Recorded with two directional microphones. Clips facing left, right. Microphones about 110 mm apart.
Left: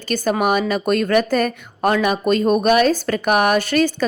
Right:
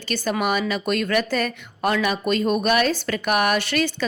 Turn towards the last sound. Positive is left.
turn(degrees=45)  # may be behind; listen again after turning